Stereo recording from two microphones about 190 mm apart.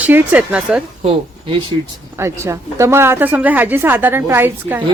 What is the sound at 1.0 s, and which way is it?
Speech, 30° right (ahead or behind).